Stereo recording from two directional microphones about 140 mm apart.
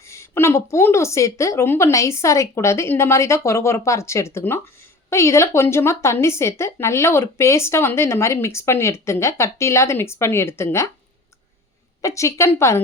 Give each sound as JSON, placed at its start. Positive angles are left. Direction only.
{"t": 0.0, "sound": "a woman's voice", "side_deg": 20}
{"t": 12.0, "sound": "a woman's voice", "side_deg": 20}